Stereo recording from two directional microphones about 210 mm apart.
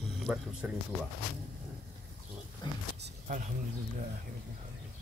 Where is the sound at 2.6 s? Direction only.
20° left (ahead or behind).